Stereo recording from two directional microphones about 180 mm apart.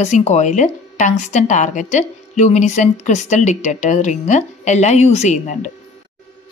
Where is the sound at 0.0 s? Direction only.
40° left (ahead or behind).